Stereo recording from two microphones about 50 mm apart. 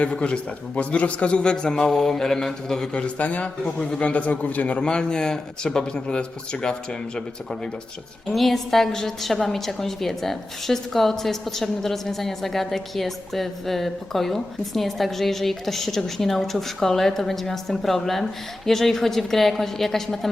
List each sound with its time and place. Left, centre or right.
0.8 s a man's voice: left
2.9 s a man's voice: left
8.3 s a woman's voice: centre